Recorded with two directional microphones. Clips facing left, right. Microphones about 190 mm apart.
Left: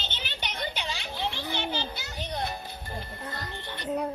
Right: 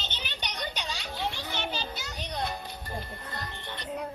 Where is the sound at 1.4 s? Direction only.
25° left (ahead or behind).